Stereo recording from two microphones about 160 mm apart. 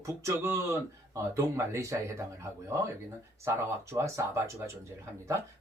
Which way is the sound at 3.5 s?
15° right (ahead or behind).